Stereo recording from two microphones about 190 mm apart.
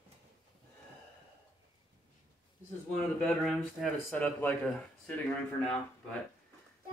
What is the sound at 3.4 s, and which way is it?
Speech, 5° left (ahead or behind).